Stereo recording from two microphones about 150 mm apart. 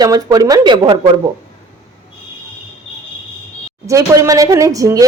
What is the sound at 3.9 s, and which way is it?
A woman's voice, 20° right (ahead or behind).